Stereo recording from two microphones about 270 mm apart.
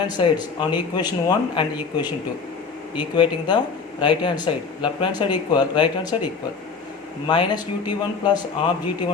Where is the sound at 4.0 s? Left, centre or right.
Centre.